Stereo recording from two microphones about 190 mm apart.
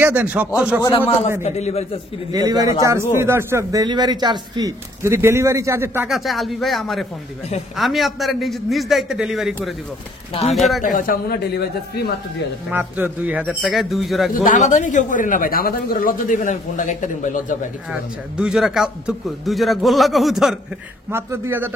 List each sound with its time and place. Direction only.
0.0 s speech: 10° right (ahead or behind)
1.4 s a man's voice: 35° left (ahead or behind)
2.3 s speech: 20° right (ahead or behind)
6.0 s a man's voice: centre (ahead or behind)
10.8 s speech: 45° left (ahead or behind)
12.6 s a man's voice: 10° right (ahead or behind)
14.3 s speech: 45° left (ahead or behind)
18.3 s a man's voice: 5° right (ahead or behind)
21.1 s speech: 10° right (ahead or behind)